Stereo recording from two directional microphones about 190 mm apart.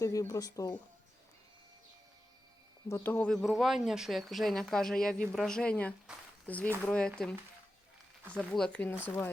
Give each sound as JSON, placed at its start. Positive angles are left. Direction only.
{"t": 0.0, "sound": "speech", "side_deg": 15}
{"t": 2.9, "sound": "speech", "side_deg": 10}